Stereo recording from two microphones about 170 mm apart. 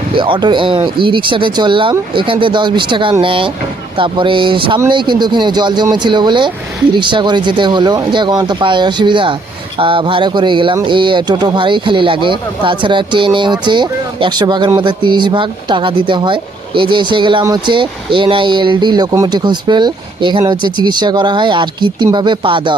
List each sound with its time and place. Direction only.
0.2 s speech: 30° right (ahead or behind)